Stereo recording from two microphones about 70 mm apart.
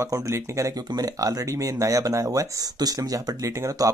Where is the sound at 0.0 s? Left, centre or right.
Right.